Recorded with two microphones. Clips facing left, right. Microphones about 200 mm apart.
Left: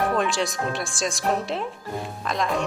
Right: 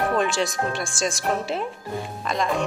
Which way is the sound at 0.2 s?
Centre (ahead or behind).